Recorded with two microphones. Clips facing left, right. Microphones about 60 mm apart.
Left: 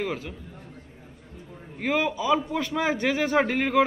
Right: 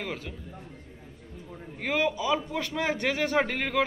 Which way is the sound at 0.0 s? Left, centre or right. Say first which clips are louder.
Left 5 dB; centre.